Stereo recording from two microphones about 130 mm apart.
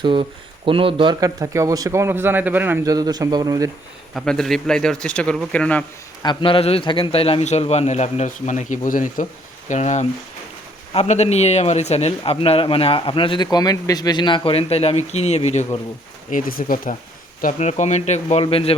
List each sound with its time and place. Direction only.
0.0 s speech: 40° right (ahead or behind)
1.2 s a man's voice: 25° right (ahead or behind)
2.8 s a man's voice: 30° right (ahead or behind)
4.1 s speech: 5° left (ahead or behind)
6.2 s a man's voice: 40° left (ahead or behind); by 9.2 s 90° left
9.6 s a man's voice: 65° left (ahead or behind)
16.3 s speech: 90° left
17.4 s a man's voice: 65° left (ahead or behind)
18.4 s a man's voice: 45° left (ahead or behind)